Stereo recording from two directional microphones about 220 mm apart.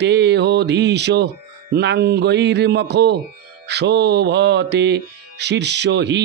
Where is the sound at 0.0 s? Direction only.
50° right (ahead or behind).